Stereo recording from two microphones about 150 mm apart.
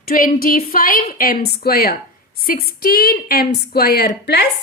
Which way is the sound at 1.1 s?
85° left.